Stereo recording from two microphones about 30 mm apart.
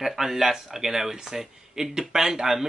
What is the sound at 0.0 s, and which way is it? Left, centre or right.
Speech, centre.